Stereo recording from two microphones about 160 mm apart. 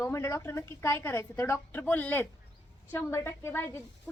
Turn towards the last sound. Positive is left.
turn(degrees=15)  # may be behind; listen again after turning